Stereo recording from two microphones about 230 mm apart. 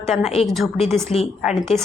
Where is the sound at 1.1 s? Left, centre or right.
Left.